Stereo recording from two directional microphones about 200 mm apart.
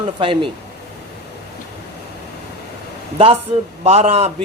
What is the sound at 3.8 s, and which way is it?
Speech, 30° right (ahead or behind).